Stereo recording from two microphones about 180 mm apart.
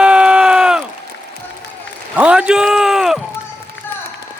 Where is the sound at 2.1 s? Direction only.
5° right (ahead or behind).